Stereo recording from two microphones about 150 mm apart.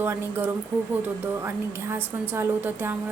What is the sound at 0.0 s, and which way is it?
Speech, 15° right (ahead or behind).